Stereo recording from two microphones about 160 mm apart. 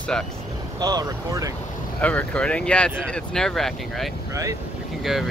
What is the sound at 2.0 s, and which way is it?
Speech, 10° left (ahead or behind).